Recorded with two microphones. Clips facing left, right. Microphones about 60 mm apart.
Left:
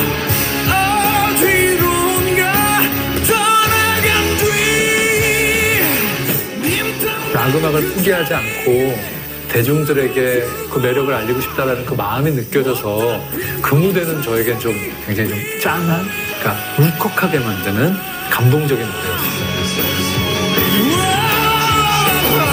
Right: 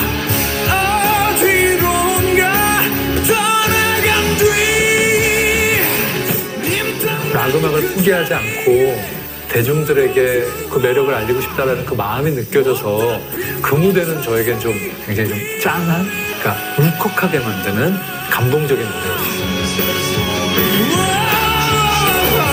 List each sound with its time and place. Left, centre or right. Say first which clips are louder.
0.9 s music: even; left
1.5 s music: even; right
2.3 s music: right 1 dB; centre
5.0 s music: right 1 dB; left
7.0 s music: right 1 dB; centre
7.8 s a man's voice: right 1 dB; centre
20.7 s music: left 2 dB; left
21.0 s music: even; centre
21.6 s music: left 1 dB; left